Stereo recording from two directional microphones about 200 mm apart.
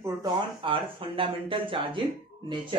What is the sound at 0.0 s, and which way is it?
Speech, 20° right (ahead or behind).